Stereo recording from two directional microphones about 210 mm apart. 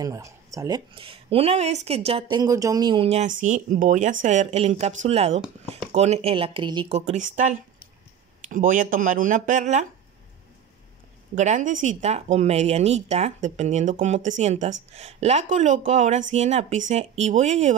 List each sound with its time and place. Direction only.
0.0 s speech: 15° right (ahead or behind); by 9.8 s 35° right (ahead or behind)
11.3 s speech: 35° right (ahead or behind)